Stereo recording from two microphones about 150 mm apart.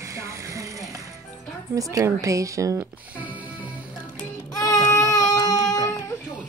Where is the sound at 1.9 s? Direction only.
20° right (ahead or behind).